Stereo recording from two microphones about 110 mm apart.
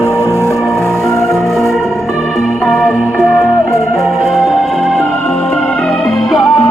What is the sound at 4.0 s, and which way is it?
Organ, centre (ahead or behind).